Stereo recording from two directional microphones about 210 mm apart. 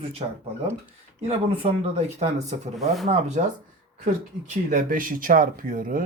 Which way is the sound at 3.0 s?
35° right (ahead or behind).